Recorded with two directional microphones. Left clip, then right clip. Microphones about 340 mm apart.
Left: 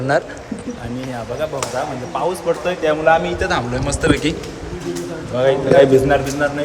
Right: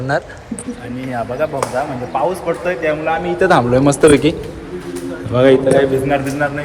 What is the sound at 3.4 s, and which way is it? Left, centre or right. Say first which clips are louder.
Speech: right 8 dB; centre.